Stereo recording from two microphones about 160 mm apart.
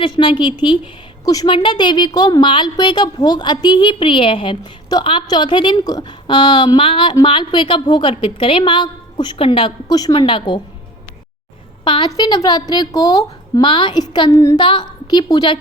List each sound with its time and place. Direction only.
0.0 s a woman's voice: 30° left (ahead or behind)
11.9 s a woman's voice: 25° left (ahead or behind)